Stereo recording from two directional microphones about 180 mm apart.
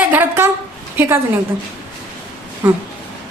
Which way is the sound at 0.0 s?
10° right (ahead or behind).